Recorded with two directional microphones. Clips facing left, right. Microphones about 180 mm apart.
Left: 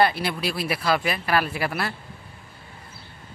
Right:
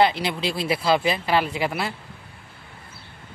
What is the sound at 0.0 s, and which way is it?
Speech, 20° right (ahead or behind).